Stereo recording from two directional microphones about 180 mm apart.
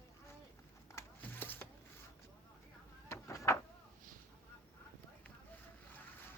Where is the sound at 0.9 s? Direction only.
10° left (ahead or behind).